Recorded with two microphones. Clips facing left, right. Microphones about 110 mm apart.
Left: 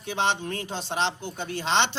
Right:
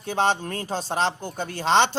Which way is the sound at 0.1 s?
40° right (ahead or behind).